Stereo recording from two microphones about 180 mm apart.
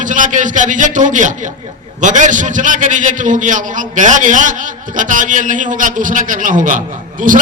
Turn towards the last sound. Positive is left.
turn(degrees=-45)  # may be behind; listen again after turning